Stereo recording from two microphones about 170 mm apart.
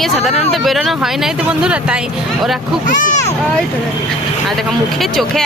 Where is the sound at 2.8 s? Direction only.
50° left (ahead or behind).